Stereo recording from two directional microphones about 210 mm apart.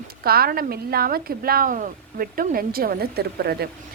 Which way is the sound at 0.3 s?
45° right (ahead or behind).